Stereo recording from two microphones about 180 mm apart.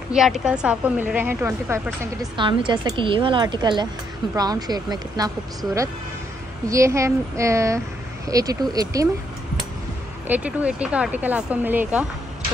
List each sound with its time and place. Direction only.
0.1 s speech: 5° right (ahead or behind)
2.3 s a woman's voice: 25° right (ahead or behind)
10.2 s speech: 10° right (ahead or behind)